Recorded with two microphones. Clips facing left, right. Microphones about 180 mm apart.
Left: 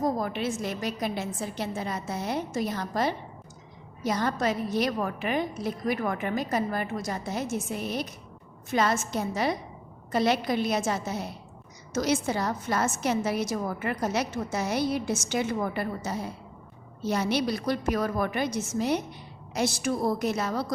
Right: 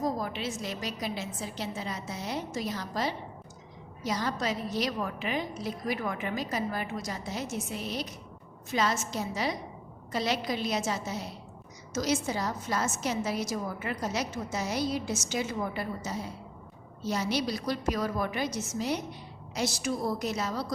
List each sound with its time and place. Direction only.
0.0 s a woman's voice: 55° left (ahead or behind)